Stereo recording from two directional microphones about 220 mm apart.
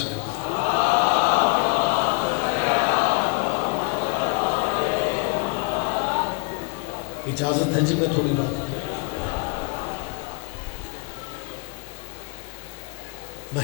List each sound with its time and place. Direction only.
0.3 s chant: 25° left (ahead or behind)
7.4 s a man's voice: 25° left (ahead or behind)
7.9 s a man's voice: 35° left (ahead or behind)
8.9 s a sound: 25° left (ahead or behind)